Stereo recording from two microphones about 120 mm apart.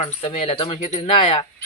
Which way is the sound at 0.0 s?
60° left (ahead or behind).